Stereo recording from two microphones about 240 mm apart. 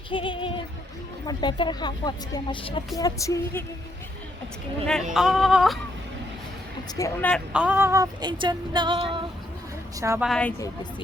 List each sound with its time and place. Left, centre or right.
0.1 s music: left
1.3 s speech: centre
5.1 s speech: centre
7.0 s speech: centre
10.2 s speech: centre